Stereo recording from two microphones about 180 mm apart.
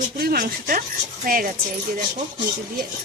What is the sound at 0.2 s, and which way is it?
Speech, 55° right (ahead or behind).